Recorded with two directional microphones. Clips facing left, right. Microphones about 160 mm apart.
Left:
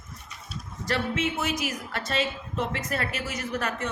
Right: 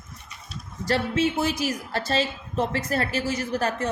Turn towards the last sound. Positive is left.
turn(degrees=-35)  # may be behind; listen again after turning